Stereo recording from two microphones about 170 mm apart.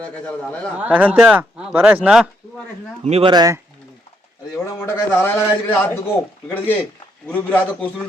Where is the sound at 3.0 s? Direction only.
35° right (ahead or behind).